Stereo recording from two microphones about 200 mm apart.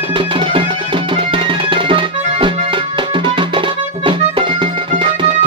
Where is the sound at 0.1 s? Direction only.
25° right (ahead or behind).